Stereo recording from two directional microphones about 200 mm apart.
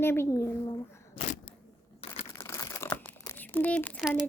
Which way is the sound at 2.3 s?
15° left (ahead or behind).